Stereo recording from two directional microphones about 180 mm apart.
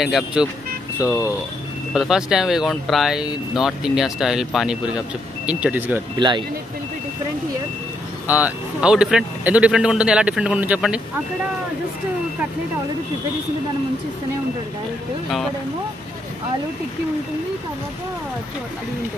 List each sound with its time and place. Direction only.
0.0 s speech: 5° right (ahead or behind)
2.0 s speech: 5° right (ahead or behind)
6.1 s speech: 25° right (ahead or behind)
8.3 s speech: 10° right (ahead or behind)